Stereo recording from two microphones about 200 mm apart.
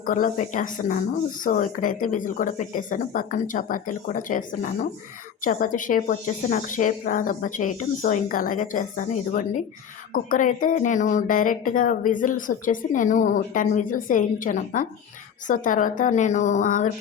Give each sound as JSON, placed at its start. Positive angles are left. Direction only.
{"t": 0.0, "sound": "speech", "side_deg": 45}